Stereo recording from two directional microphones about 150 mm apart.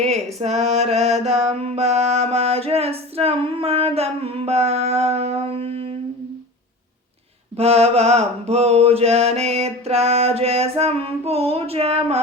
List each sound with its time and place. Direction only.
0.0 s mantra: 45° right (ahead or behind)
7.5 s mantra: 45° right (ahead or behind)